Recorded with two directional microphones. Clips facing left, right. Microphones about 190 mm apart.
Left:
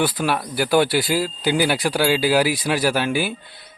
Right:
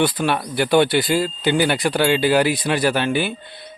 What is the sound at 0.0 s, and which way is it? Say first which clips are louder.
Speech: right 2 dB; 5° left (ahead or behind).